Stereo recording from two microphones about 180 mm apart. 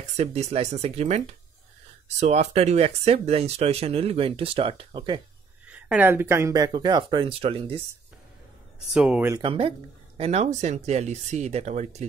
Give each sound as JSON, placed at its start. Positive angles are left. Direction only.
{"t": 0.2, "sound": "speech", "side_deg": -35}
{"t": 5.7, "sound": "speech", "side_deg": -10}
{"t": 8.9, "sound": "speech", "side_deg": -5}
{"t": 9.3, "sound": "speech", "side_deg": -30}